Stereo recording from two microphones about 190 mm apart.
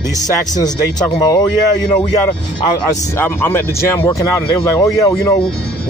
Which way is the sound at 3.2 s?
10° left (ahead or behind).